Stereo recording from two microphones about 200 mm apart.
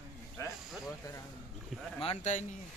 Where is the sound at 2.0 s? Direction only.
35° left (ahead or behind).